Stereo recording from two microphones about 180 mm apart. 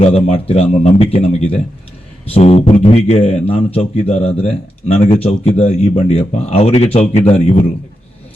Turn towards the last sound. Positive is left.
turn(degrees=35)  # may be behind; listen again after turning